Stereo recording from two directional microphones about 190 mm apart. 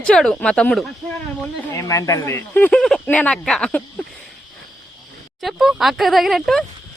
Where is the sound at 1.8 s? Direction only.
15° left (ahead or behind).